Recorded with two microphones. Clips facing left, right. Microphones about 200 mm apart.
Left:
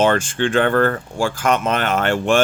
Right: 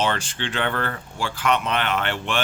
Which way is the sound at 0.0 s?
50° left (ahead or behind).